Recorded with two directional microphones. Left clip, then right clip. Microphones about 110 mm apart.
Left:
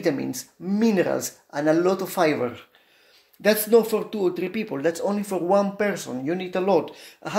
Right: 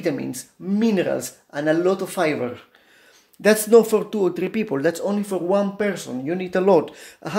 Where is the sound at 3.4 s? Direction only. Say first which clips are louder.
Right 4 dB; 20° right (ahead or behind).